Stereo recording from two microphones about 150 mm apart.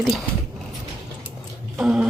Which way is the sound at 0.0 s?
5° left (ahead or behind).